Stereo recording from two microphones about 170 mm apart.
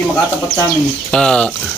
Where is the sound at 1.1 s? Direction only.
5° left (ahead or behind).